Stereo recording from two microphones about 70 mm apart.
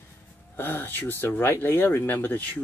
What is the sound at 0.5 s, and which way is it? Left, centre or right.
Speech, left.